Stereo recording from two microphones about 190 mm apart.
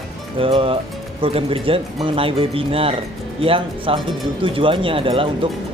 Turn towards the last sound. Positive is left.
turn(degrees=-30)  # may be behind; listen again after turning